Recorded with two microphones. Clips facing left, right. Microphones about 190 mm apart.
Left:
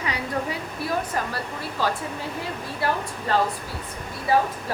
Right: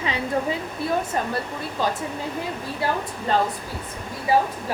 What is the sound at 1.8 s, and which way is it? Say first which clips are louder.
Speech: right 1 dB; 20° right (ahead or behind).